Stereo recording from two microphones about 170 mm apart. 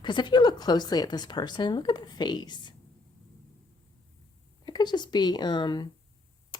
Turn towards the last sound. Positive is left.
turn(degrees=25)  # may be behind; listen again after turning